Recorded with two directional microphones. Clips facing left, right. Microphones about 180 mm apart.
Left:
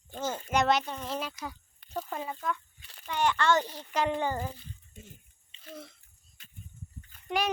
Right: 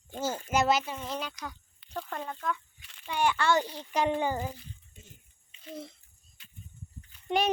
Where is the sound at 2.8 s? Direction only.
35° left (ahead or behind).